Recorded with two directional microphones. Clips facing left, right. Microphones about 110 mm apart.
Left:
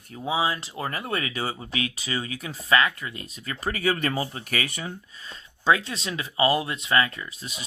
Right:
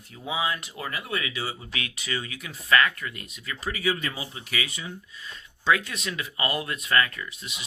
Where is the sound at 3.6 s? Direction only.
50° left (ahead or behind).